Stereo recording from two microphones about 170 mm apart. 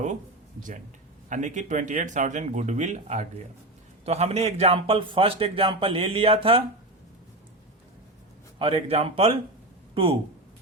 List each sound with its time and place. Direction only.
1.3 s a man's voice: 45° right (ahead or behind)
8.5 s a man's voice: 30° right (ahead or behind)